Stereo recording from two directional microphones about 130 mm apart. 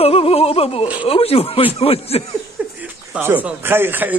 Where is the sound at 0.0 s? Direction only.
50° left (ahead or behind).